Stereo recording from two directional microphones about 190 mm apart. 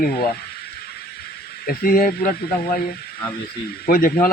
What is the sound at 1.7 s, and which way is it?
Speech, 50° left (ahead or behind).